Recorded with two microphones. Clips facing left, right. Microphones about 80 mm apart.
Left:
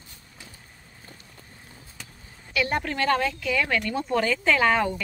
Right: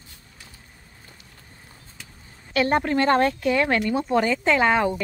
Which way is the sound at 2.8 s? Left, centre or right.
Right.